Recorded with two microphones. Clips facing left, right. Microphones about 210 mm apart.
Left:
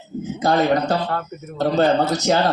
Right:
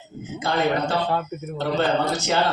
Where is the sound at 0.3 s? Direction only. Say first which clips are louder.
Left 4 dB; 40° left (ahead or behind).